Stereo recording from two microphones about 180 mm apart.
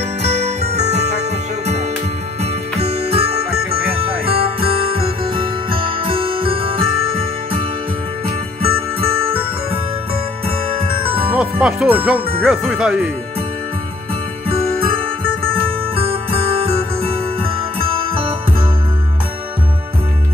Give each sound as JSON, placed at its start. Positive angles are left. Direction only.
{"t": 0.3, "sound": "music", "side_deg": -40}
{"t": 2.4, "sound": "music", "side_deg": -35}
{"t": 5.8, "sound": "jingle bell", "side_deg": -30}
{"t": 10.8, "sound": "music", "side_deg": -30}
{"t": 11.3, "sound": "speech", "side_deg": -5}
{"t": 15.6, "sound": "music", "side_deg": -30}